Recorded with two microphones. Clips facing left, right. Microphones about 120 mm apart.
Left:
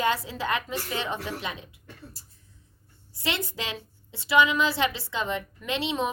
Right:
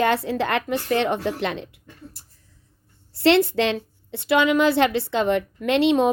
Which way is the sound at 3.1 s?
70° right (ahead or behind).